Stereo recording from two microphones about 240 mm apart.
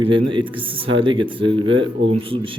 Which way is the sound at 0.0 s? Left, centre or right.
Right.